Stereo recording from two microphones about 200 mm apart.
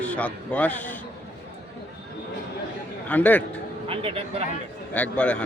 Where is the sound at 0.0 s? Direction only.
5° left (ahead or behind).